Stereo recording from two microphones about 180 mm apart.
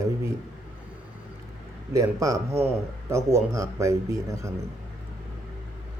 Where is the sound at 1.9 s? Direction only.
20° right (ahead or behind).